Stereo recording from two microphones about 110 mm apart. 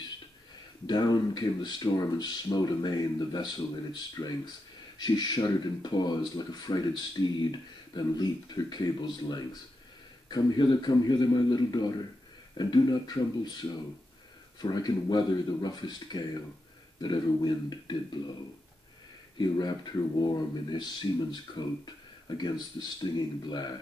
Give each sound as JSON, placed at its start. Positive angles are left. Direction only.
{"t": 0.8, "sound": "speech", "side_deg": 40}
{"t": 19.3, "sound": "speech", "side_deg": 40}